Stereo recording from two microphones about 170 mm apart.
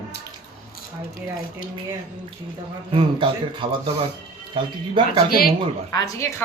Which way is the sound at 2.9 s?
30° right (ahead or behind).